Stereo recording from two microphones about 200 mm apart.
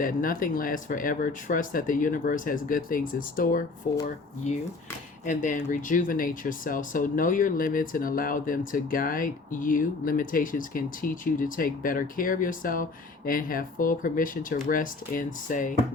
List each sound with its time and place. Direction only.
0.0 s speech: 45° left (ahead or behind)
5.2 s speech: 40° left (ahead or behind)